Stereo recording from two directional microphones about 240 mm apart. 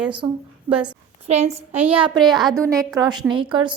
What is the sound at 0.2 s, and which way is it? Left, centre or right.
Speech, centre.